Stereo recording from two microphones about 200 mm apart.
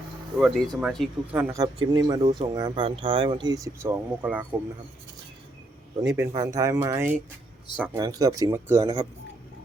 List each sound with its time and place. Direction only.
0.3 s speech: 5° right (ahead or behind)
6.0 s speech: 15° right (ahead or behind)